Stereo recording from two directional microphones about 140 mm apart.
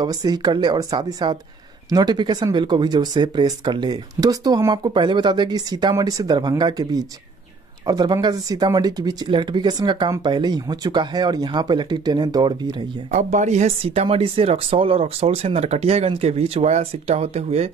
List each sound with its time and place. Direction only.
0.0 s speech: 30° right (ahead or behind)
13.1 s speech: 60° right (ahead or behind)